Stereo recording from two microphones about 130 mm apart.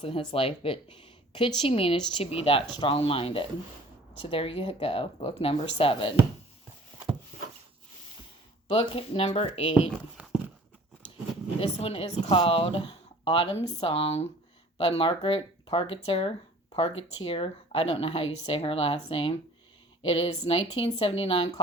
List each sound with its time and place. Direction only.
0.0 s speech: 45° left (ahead or behind)
8.6 s speech: 45° left (ahead or behind)
11.6 s speech: 50° left (ahead or behind)